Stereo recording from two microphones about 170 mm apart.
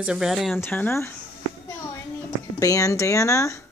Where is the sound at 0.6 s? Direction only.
10° left (ahead or behind).